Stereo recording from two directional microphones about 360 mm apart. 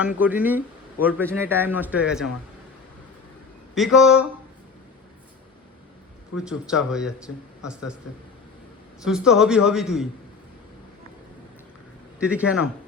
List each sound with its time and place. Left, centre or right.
0.0 s speech: centre
3.8 s speech: centre
6.3 s speech: centre
9.0 s speech: centre
12.2 s speech: centre